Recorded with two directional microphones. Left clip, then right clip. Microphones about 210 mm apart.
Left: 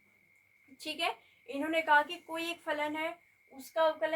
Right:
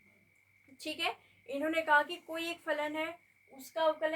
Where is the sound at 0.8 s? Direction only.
10° right (ahead or behind).